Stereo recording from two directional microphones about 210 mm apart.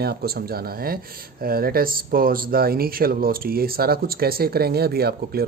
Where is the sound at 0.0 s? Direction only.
50° right (ahead or behind).